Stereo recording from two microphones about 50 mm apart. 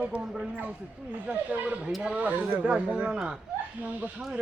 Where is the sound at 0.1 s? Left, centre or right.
Right.